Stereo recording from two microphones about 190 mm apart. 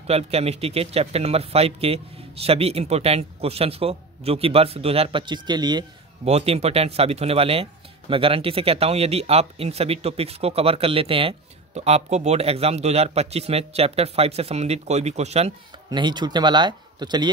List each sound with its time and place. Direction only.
0.0 s speech: 35° right (ahead or behind)
6.2 s speech: 35° right (ahead or behind)